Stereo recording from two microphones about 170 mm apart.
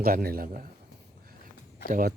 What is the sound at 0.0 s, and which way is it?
Speech, 60° right (ahead or behind).